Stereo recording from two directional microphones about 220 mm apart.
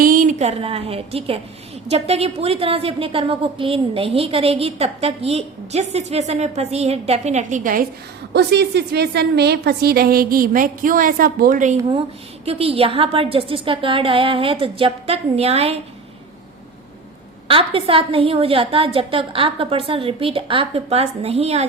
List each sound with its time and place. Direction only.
0.0 s a woman's voice: 40° right (ahead or behind)
8.3 s a woman's voice: 50° right (ahead or behind); by 15.8 s 30° right (ahead or behind)
17.5 s a woman's voice: 25° right (ahead or behind)